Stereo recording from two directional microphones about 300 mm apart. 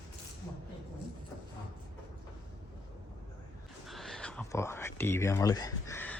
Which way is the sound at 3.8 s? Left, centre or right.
Centre.